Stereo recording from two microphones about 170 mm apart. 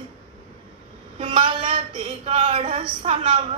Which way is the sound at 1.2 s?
30° right (ahead or behind).